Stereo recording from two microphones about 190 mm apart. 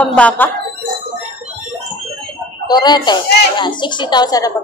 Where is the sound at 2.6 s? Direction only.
20° left (ahead or behind).